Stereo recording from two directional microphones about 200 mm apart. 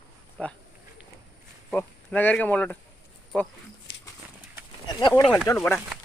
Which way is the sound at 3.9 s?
60° left (ahead or behind).